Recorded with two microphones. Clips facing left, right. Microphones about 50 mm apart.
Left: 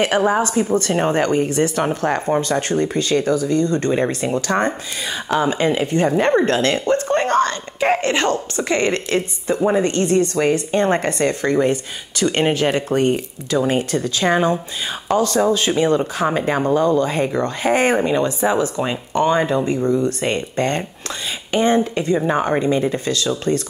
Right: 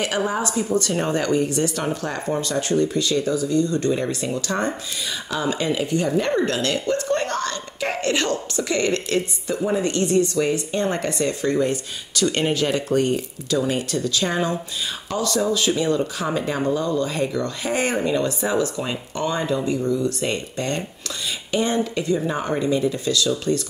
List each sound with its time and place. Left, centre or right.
0.0 s speech: left